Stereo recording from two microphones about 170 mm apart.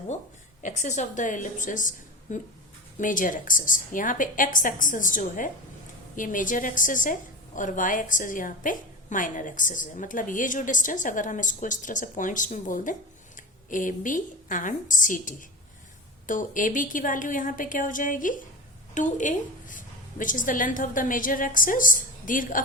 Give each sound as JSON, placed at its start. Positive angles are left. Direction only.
{"t": 0.6, "sound": "a woman's voice", "side_deg": 45}